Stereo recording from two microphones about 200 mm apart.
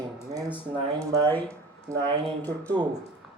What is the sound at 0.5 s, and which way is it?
Speech, 20° right (ahead or behind).